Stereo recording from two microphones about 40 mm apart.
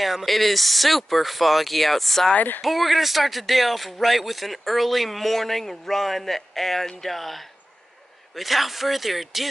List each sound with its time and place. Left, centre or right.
0.0 s speech: centre
2.3 s speech: left
2.6 s speech: centre